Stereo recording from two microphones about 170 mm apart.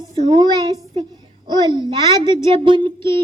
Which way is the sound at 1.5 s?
25° right (ahead or behind).